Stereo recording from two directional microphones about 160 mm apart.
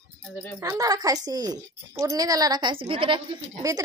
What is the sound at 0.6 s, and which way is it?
A woman's voice, 20° right (ahead or behind).